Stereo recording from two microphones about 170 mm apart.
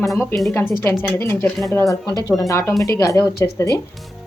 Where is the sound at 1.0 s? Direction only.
15° left (ahead or behind).